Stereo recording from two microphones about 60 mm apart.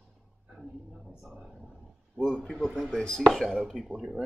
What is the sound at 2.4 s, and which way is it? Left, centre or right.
A man's voice, centre.